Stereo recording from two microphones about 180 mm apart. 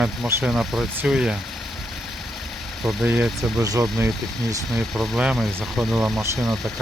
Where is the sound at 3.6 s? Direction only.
20° right (ahead or behind).